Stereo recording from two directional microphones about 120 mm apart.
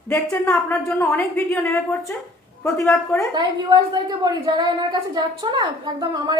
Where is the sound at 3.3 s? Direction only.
35° right (ahead or behind).